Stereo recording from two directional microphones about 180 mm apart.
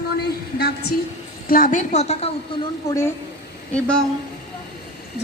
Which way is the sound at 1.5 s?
50° left (ahead or behind).